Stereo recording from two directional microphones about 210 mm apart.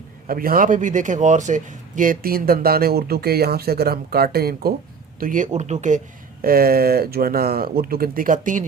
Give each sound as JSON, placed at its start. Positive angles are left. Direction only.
{"t": 0.3, "sound": "a man's voice", "side_deg": -45}
{"t": 6.4, "sound": "a man's voice", "side_deg": -45}